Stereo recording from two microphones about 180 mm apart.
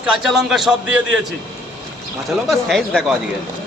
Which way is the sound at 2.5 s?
Centre (ahead or behind).